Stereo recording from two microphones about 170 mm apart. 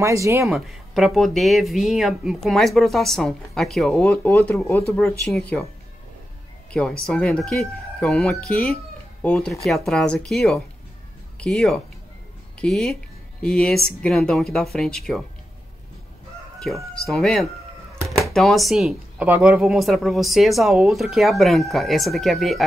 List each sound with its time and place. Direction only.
0.0 s speech: 15° right (ahead or behind)
0.5 s speech: centre (ahead or behind)
6.7 s speech: 5° left (ahead or behind)
16.6 s speech: centre (ahead or behind)